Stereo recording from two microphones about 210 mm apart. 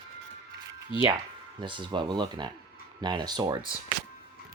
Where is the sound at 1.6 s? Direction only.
20° right (ahead or behind).